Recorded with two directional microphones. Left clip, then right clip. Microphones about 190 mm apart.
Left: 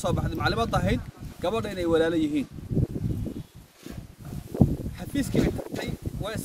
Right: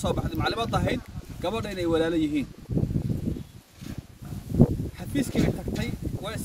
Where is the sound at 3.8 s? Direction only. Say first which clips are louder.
Right 1 dB; 55° left (ahead or behind).